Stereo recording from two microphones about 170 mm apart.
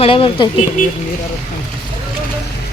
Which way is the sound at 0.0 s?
30° left (ahead or behind).